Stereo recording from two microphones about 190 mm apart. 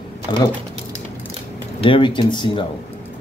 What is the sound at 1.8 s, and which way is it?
Speech, 25° left (ahead or behind).